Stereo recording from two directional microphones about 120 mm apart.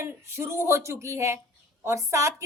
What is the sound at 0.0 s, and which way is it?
A woman's voice, 20° right (ahead or behind).